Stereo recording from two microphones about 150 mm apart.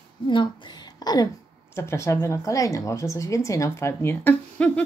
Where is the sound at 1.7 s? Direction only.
15° left (ahead or behind).